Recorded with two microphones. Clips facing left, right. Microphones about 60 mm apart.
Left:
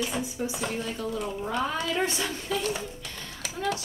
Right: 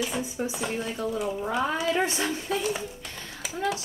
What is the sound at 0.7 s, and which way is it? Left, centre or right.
Speech, centre.